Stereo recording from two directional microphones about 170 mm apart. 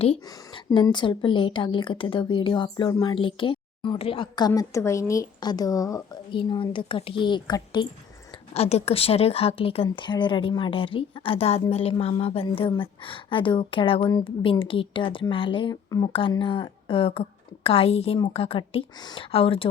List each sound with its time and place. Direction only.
0.0 s a woman's voice: 30° left (ahead or behind)
8.5 s speech: 35° left (ahead or behind)